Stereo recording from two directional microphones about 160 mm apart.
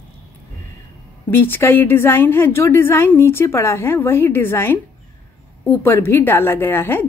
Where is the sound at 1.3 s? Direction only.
15° left (ahead or behind).